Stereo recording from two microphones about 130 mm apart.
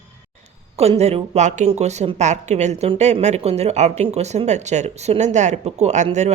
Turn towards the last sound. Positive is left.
turn(degrees=-60)  # may be behind; listen again after turning